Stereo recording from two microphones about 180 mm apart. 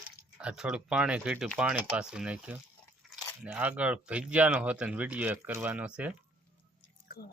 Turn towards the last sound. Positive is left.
turn(degrees=55)  # may be behind; listen again after turning